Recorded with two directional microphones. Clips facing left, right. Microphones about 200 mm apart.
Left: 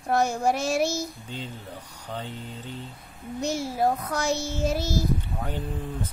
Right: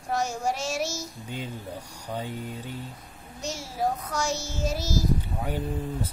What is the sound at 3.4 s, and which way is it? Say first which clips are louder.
Child singing: left 5 dB; 55° left (ahead or behind).